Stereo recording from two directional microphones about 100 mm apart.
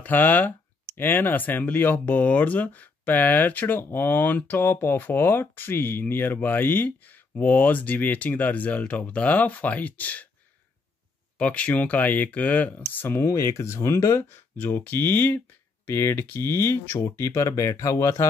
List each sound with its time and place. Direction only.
0.0 s speech: 20° left (ahead or behind)
11.3 s speech: 15° left (ahead or behind); by 18.2 s 30° left (ahead or behind)